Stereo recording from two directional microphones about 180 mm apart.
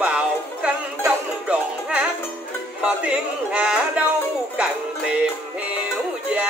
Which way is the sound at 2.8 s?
5° right (ahead or behind).